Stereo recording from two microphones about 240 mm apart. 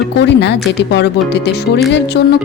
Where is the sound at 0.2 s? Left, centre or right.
Left.